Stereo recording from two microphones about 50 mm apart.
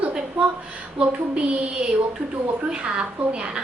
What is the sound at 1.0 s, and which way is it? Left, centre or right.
A woman's voice, right.